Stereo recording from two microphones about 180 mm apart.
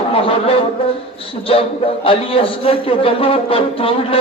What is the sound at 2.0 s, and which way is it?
A man's voice, 30° left (ahead or behind).